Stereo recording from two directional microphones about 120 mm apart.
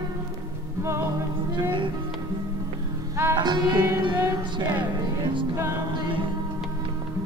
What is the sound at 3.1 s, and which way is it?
Music, 20° right (ahead or behind).